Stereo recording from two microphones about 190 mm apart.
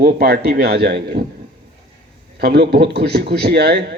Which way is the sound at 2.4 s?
55° right (ahead or behind).